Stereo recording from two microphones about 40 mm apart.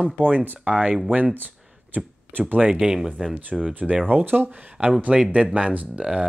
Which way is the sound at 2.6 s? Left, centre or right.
Centre.